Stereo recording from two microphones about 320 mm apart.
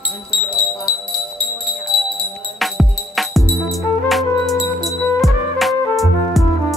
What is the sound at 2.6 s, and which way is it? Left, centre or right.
Music, centre.